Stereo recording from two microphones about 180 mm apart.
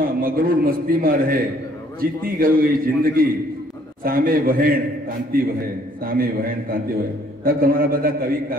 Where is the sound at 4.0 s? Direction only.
55° right (ahead or behind).